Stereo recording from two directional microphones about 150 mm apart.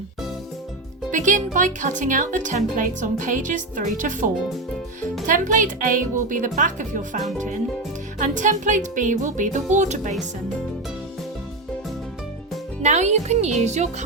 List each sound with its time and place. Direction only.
1.1 s speech: 55° right (ahead or behind)
8.2 s speech: 55° right (ahead or behind)
12.8 s a child's voice: 50° right (ahead or behind)